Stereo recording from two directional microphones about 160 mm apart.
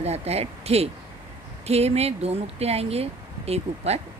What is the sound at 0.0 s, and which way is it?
Speech, 40° right (ahead or behind).